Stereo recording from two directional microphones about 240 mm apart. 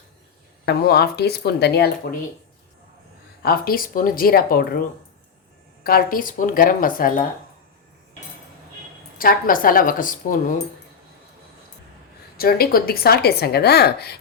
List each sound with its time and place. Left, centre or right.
0.6 s a woman's voice: left
3.4 s a woman's voice: left
5.8 s a woman's voice: left
9.1 s a woman's voice: left
12.4 s a woman's voice: left